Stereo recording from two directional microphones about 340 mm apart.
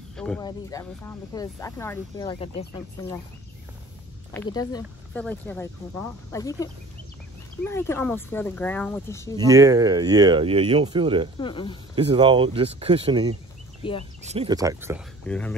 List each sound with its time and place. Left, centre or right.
0.1 s speech: centre
4.3 s speech: centre
9.4 s speech: centre
11.3 s speech: centre
11.9 s speech: centre
13.8 s speech: centre
14.2 s speech: centre